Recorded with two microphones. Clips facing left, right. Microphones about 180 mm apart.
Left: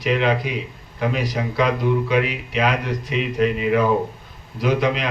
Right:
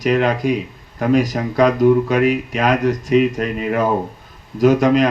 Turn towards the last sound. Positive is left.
turn(degrees=-45)  # may be behind; listen again after turning